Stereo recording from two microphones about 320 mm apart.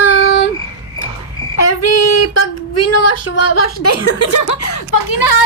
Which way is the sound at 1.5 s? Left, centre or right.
Left.